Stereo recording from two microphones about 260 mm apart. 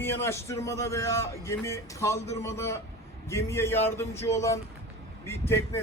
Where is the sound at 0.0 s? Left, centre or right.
Centre.